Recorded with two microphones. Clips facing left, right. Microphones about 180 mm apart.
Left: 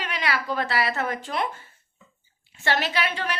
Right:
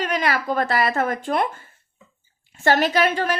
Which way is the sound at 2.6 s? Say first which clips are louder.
Right 7 dB; 45° right (ahead or behind).